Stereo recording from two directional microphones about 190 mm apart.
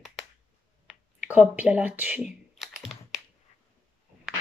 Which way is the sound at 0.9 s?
5° right (ahead or behind).